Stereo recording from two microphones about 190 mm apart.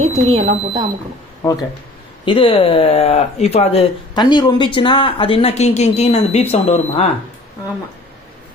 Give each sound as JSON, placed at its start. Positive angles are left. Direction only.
{"t": 0.0, "sound": "speech", "side_deg": -35}
{"t": 1.4, "sound": "speech", "side_deg": 20}